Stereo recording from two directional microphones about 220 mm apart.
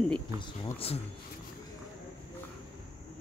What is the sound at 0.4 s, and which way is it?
Speech, 25° left (ahead or behind).